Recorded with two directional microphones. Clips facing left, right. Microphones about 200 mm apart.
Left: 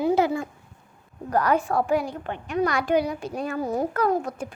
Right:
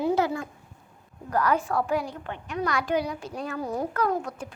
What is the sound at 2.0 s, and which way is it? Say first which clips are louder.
Speech: left 4 dB; 55° left (ahead or behind).